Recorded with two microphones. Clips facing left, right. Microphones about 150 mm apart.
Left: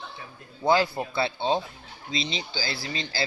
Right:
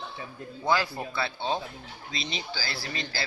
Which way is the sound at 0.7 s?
25° left (ahead or behind).